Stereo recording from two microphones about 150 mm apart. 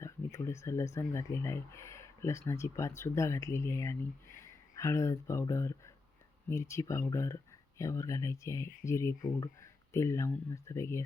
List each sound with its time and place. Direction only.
0.0 s speech: 20° left (ahead or behind)